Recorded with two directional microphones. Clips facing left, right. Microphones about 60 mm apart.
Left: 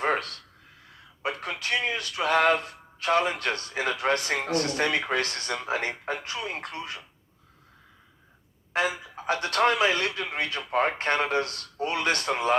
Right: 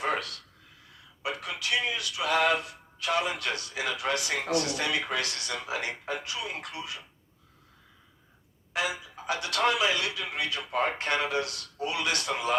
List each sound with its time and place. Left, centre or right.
0.0 s a sound: left
1.2 s speech: left
8.7 s speech: left